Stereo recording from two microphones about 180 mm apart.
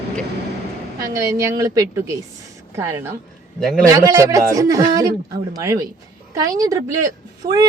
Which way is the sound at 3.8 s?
15° right (ahead or behind).